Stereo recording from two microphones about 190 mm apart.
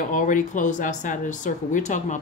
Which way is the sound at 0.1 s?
45° left (ahead or behind).